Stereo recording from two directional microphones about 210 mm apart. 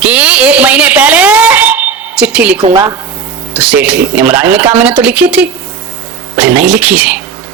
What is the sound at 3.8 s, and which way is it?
Speech, 5° right (ahead or behind).